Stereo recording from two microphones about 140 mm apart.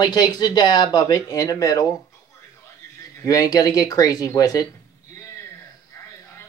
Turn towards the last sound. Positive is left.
turn(degrees=25)  # may be behind; listen again after turning